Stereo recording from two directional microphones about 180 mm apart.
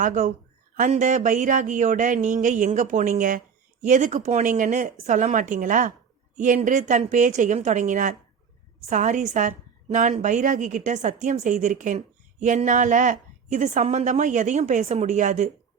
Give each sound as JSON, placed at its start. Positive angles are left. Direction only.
{"t": 0.0, "sound": "a woman's voice", "side_deg": -45}